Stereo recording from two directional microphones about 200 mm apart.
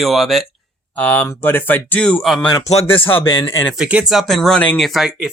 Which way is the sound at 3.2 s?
15° left (ahead or behind).